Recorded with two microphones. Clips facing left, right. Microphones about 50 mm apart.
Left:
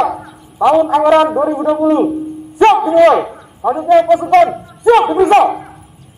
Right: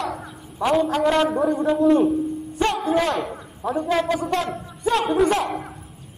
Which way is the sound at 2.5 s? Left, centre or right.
Left.